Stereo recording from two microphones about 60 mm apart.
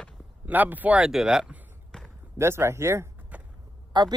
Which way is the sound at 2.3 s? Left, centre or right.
Right.